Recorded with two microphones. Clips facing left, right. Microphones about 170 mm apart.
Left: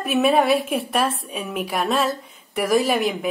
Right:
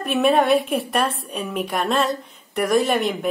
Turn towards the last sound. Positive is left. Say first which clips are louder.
# even
turn(degrees=0)  # may be behind; listen again after turning